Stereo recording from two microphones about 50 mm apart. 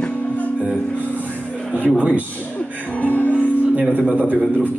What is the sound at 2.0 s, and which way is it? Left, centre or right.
Speech, right.